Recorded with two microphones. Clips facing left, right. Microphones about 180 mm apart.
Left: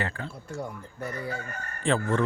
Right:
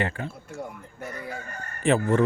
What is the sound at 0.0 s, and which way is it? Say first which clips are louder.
Speech: right 4 dB; 20° right (ahead or behind).